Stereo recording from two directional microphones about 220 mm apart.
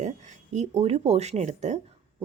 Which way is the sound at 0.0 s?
35° right (ahead or behind).